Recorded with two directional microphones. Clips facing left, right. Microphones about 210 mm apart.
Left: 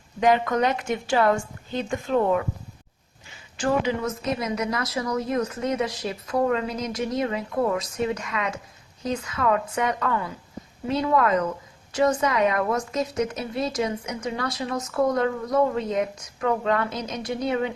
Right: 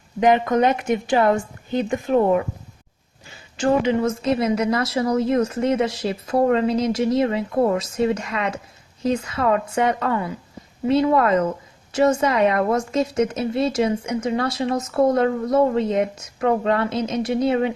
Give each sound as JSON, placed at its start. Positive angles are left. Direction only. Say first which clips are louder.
{"t": 0.2, "sound": "a woman's voice", "louder": "right 4 dB", "side_deg": -20}
{"t": 3.6, "sound": "a woman's voice", "louder": "right 5 dB", "side_deg": -25}